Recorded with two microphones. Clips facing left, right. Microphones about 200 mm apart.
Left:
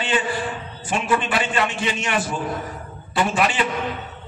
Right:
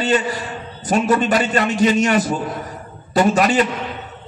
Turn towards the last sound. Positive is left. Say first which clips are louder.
# right 6 dB
turn(degrees=-40)  # may be behind; listen again after turning